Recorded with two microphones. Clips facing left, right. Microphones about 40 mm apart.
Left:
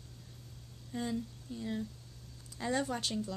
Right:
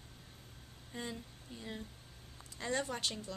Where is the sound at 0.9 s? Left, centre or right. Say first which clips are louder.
Left 7 dB; centre.